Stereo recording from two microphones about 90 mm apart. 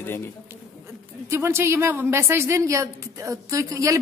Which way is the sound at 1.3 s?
30° right (ahead or behind).